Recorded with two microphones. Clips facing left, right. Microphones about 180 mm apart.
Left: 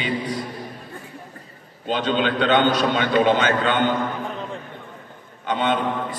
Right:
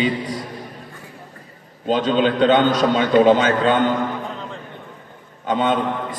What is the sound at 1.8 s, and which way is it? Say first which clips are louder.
A man's voice: right 4 dB; 35° right (ahead or behind).